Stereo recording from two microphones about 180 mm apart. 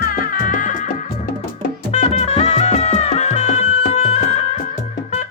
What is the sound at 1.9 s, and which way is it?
Music, 40° left (ahead or behind).